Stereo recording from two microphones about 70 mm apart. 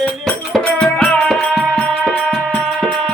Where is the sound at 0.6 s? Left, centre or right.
Centre.